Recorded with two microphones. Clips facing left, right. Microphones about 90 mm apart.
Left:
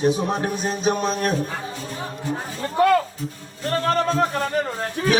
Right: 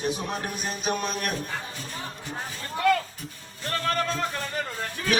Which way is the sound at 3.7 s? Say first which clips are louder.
Left 6 dB; 30° left (ahead or behind).